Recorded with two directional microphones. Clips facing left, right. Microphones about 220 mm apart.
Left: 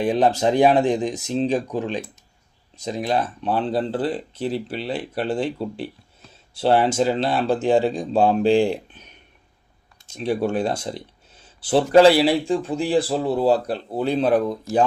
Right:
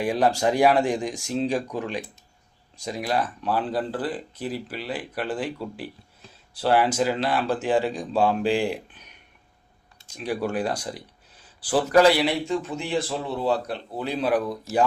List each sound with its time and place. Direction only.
0.0 s speech: 20° left (ahead or behind)
10.1 s speech: 25° left (ahead or behind)